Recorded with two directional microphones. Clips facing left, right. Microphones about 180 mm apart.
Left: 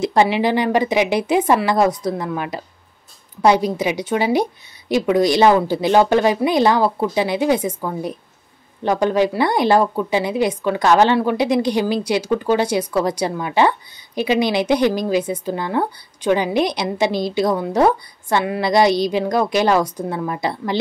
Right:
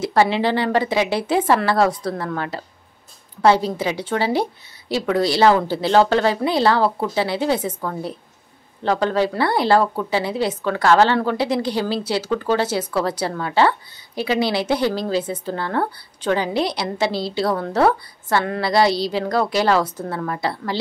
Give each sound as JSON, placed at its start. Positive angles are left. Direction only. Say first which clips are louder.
{"t": 0.0, "sound": "a woman's voice", "louder": "left 2 dB", "side_deg": 20}